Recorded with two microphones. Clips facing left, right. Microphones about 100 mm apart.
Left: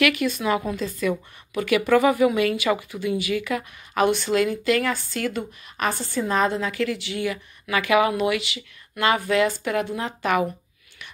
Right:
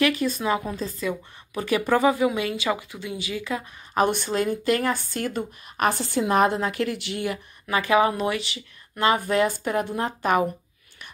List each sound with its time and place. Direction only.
0.0 s speech: 35° right (ahead or behind)
1.0 s speech: 25° right (ahead or behind)
4.0 s speech: 50° right (ahead or behind)
5.9 s a woman's voice: 70° right (ahead or behind); by 7.3 s 55° right (ahead or behind)
7.6 s speech: 35° right (ahead or behind)